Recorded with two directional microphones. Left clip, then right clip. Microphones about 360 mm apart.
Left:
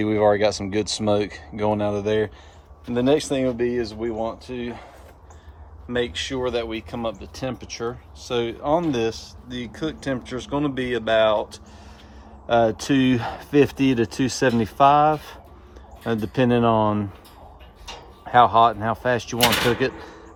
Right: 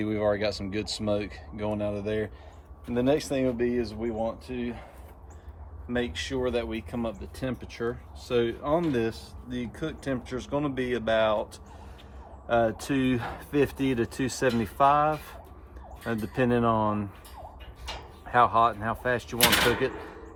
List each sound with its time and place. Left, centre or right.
0.0 s speech: centre
5.9 s speech: left
18.3 s speech: left